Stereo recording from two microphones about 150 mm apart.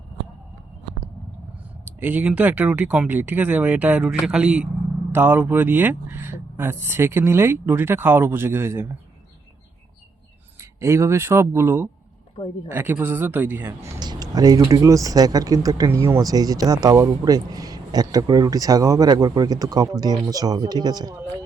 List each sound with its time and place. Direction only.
2.0 s speech: 10° right (ahead or behind)
10.6 s speech: 20° right (ahead or behind)